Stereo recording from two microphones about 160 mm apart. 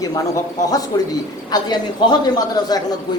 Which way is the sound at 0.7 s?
20° left (ahead or behind).